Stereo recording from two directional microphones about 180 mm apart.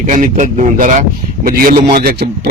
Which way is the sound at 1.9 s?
55° right (ahead or behind).